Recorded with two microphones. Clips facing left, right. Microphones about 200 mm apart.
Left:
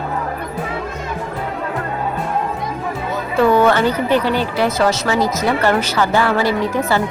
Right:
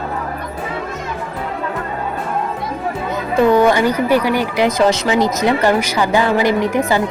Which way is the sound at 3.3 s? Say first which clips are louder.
Right 1 dB; 15° right (ahead or behind).